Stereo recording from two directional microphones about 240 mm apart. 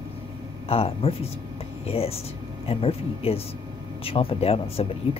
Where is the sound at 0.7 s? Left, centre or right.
Left.